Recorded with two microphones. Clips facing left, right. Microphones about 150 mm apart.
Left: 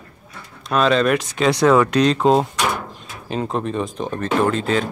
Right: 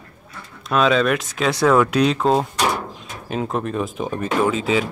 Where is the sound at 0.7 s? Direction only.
Centre (ahead or behind).